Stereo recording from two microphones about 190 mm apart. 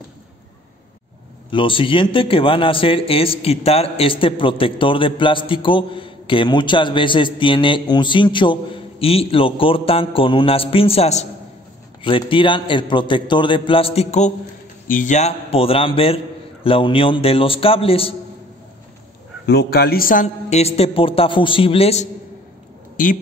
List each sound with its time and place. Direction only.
1.5 s a man's voice: 25° left (ahead or behind)
19.4 s a man's voice: 60° left (ahead or behind); by 22.0 s 30° left (ahead or behind)
23.0 s speech: 45° left (ahead or behind)